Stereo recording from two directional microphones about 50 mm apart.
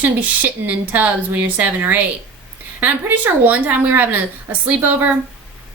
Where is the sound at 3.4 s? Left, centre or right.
Right.